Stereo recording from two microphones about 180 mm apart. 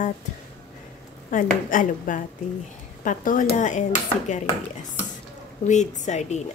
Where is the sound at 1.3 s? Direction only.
45° left (ahead or behind).